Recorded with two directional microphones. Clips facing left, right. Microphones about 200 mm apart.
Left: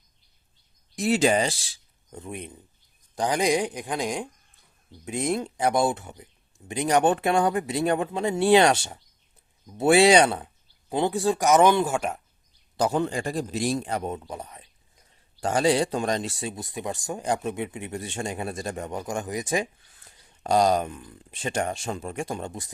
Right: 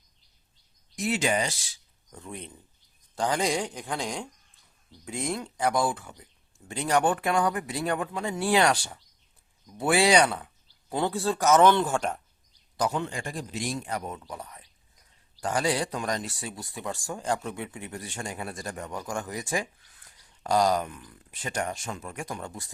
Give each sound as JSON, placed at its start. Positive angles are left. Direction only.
{"t": 0.9, "sound": "speech", "side_deg": 35}
{"t": 12.7, "sound": "a man's voice", "side_deg": 30}